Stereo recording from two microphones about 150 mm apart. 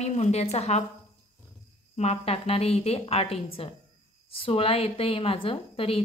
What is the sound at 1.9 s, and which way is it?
A woman's voice, 45° left (ahead or behind).